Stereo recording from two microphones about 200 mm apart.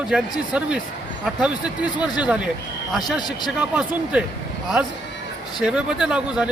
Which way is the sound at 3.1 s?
20° left (ahead or behind).